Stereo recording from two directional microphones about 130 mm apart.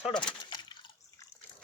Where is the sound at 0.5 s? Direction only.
35° left (ahead or behind).